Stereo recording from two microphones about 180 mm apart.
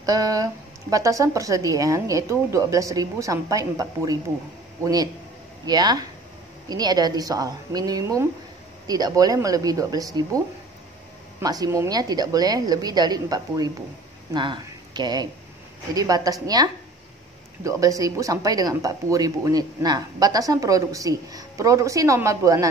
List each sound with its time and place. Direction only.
0.0 s speech: 20° right (ahead or behind)
11.4 s speech: 20° right (ahead or behind)
17.6 s speech: 20° right (ahead or behind)